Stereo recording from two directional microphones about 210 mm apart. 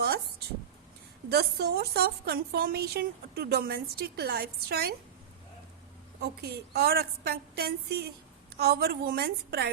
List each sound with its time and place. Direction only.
0.0 s a sound: 50° right (ahead or behind)
1.3 s a woman's voice: 50° right (ahead or behind)
6.7 s a woman's voice: 50° right (ahead or behind)